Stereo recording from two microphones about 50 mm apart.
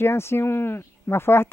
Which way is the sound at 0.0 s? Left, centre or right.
Left.